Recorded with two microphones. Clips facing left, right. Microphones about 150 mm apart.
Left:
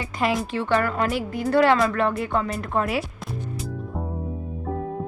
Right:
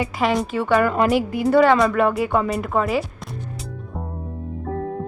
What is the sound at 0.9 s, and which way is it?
Speech, 20° right (ahead or behind).